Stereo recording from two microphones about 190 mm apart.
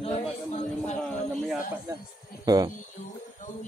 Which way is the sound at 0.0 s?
30° left (ahead or behind).